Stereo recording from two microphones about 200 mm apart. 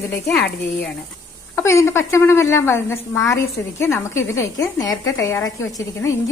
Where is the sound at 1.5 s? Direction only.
15° left (ahead or behind).